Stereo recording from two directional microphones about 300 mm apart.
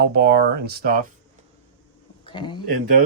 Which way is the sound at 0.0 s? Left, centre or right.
Right.